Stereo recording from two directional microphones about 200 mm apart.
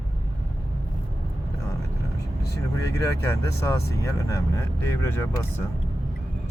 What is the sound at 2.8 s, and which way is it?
Speech, 15° left (ahead or behind).